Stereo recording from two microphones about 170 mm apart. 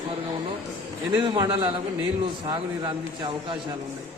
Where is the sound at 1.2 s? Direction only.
30° right (ahead or behind).